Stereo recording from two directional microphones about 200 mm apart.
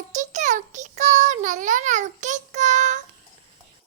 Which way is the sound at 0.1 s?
35° right (ahead or behind).